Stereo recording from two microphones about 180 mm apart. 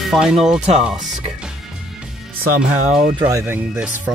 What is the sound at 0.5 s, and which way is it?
Speech, 40° right (ahead or behind).